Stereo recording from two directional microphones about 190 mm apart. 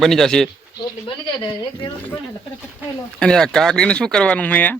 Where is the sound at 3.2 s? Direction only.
5° left (ahead or behind).